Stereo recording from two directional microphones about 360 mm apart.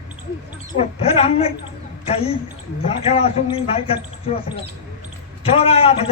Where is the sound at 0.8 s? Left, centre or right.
Centre.